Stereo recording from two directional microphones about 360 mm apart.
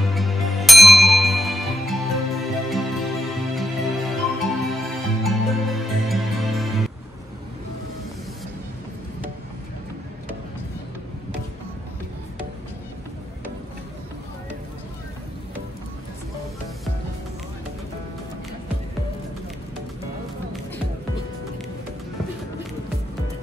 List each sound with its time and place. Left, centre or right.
0.1 s music: centre